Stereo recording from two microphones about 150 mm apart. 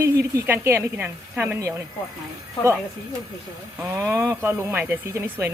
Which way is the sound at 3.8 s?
15° right (ahead or behind).